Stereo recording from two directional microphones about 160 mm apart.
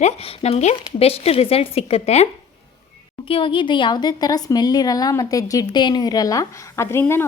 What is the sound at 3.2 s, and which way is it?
A woman's voice, 30° left (ahead or behind).